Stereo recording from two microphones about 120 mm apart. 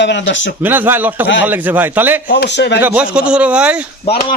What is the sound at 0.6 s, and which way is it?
A man's voice, 15° right (ahead or behind).